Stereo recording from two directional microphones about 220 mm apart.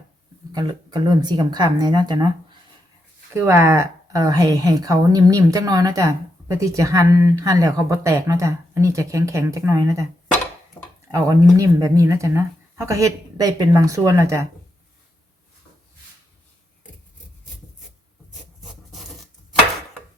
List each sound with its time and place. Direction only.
0.5 s speech: 15° right (ahead or behind)
3.3 s speech: 10° right (ahead or behind)
11.1 s speech: 15° right (ahead or behind)